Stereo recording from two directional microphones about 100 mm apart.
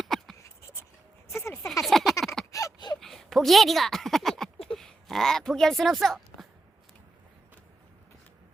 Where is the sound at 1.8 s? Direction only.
Centre (ahead or behind).